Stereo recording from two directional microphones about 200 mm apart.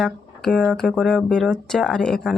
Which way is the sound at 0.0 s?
5° left (ahead or behind).